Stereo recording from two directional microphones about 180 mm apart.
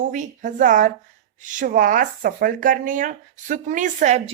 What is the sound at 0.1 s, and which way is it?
A woman's voice, 45° right (ahead or behind).